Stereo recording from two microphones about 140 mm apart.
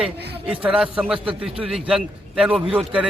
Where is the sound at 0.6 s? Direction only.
5° right (ahead or behind).